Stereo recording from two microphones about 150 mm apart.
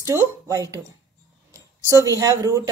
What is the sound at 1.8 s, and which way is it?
Speech, 20° right (ahead or behind).